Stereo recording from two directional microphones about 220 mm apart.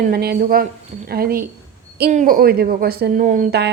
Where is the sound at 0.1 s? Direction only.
45° right (ahead or behind).